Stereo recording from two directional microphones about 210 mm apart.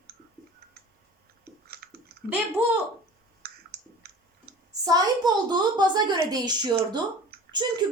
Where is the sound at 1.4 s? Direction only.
50° right (ahead or behind).